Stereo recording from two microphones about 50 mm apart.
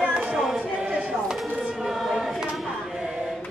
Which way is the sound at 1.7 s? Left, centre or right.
Centre.